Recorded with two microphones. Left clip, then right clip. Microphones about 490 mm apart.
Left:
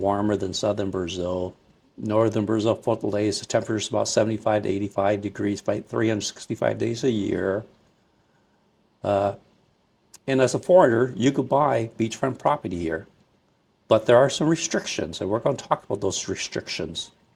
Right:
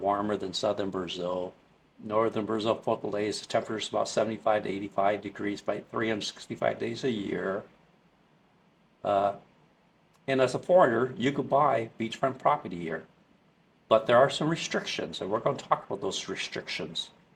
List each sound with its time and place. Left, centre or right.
0.0 s speech: left
9.0 s speech: left
13.8 s speech: left